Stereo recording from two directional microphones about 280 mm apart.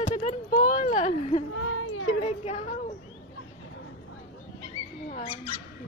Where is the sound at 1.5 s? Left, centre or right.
Left.